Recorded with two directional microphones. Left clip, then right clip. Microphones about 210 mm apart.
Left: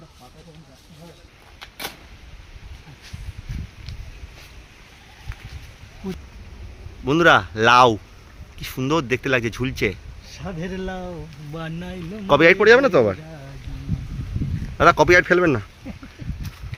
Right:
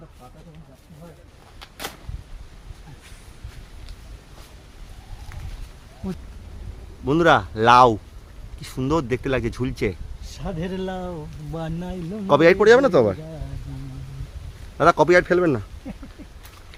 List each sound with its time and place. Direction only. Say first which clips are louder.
7.0 s speech: left 2 dB; centre (ahead or behind)
10.2 s speech: right 1 dB; 15° right (ahead or behind)
12.3 s speech: left 1 dB; centre (ahead or behind)
14.8 s speech: left 2 dB; centre (ahead or behind)